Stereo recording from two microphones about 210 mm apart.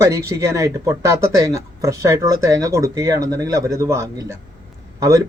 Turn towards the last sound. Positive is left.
turn(degrees=-15)  # may be behind; listen again after turning